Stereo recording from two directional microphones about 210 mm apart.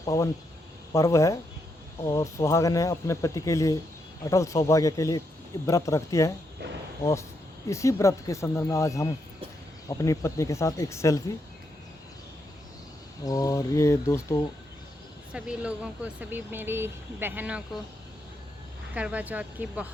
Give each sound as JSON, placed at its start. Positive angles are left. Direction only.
{"t": 0.0, "sound": "speech", "side_deg": 15}
{"t": 13.2, "sound": "speech", "side_deg": 15}
{"t": 15.3, "sound": "speech", "side_deg": -5}
{"t": 18.9, "sound": "speech", "side_deg": -5}